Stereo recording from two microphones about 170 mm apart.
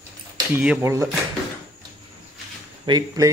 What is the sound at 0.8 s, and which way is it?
Speech, 15° right (ahead or behind).